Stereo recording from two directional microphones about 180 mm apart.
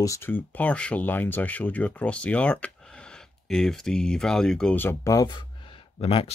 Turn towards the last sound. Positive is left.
turn(degrees=30)  # may be behind; listen again after turning